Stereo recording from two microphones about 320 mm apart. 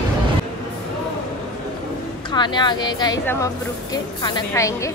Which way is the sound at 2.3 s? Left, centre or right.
Centre.